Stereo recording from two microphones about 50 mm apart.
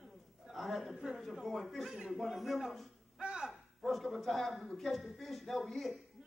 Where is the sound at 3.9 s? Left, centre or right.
Centre.